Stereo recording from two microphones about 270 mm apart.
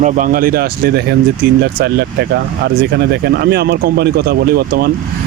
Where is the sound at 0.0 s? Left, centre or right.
Right.